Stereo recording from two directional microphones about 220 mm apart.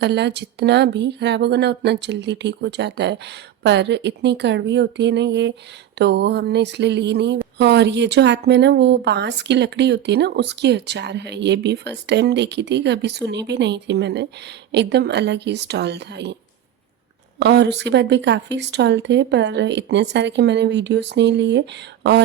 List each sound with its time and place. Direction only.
0.0 s speech: 50° right (ahead or behind)
17.4 s speech: 50° right (ahead or behind)